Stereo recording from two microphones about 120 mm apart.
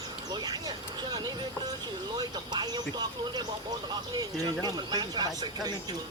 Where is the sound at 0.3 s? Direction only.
35° right (ahead or behind).